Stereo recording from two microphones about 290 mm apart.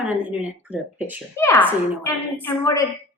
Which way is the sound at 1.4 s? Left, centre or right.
Centre.